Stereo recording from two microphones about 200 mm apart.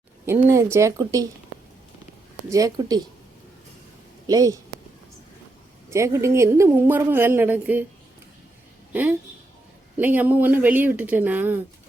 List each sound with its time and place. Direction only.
0.4 s a woman's voice: 15° right (ahead or behind)
2.5 s a woman's voice: 15° right (ahead or behind)
4.3 s speech: 20° right (ahead or behind)
5.9 s a woman's voice: 15° right (ahead or behind)
8.9 s a woman's voice: 10° right (ahead or behind)